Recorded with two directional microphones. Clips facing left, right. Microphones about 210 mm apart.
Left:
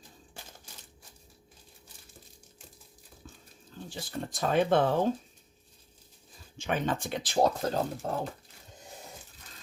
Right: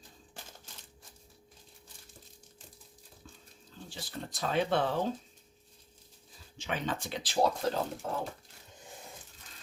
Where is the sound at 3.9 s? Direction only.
50° left (ahead or behind).